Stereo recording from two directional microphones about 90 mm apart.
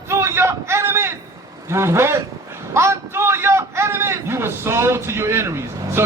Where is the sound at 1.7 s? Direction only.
30° right (ahead or behind).